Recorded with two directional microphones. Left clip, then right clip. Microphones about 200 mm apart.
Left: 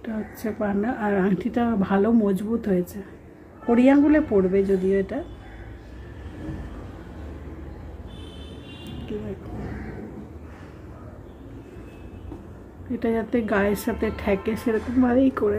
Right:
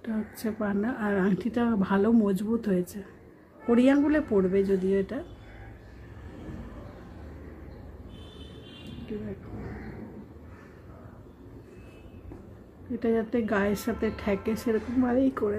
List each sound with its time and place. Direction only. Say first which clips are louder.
0.0 s speech: left 3 dB; 15° right (ahead or behind)
13.0 s speech: left 3 dB; 10° right (ahead or behind)